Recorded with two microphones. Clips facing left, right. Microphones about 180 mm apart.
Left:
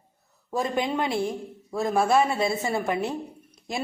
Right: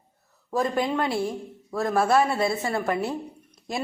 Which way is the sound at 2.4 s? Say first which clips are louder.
Right 1 dB; 20° left (ahead or behind).